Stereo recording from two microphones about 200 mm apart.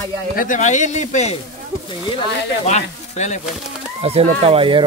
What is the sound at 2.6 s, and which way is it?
Speech, 35° left (ahead or behind).